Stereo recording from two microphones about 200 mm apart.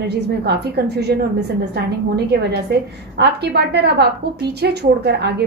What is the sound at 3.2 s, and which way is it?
A woman's voice, 55° right (ahead or behind).